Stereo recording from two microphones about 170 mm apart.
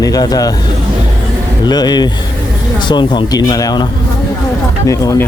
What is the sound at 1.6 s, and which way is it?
Speech, 25° left (ahead or behind).